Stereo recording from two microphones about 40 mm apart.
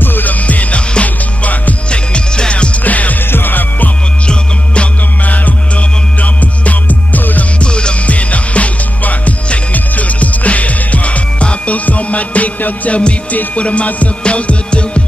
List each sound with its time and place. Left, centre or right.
0.0 s music: left
1.9 s music: left
2.8 s music: left
3.3 s music: left
5.2 s music: left
7.6 s music: left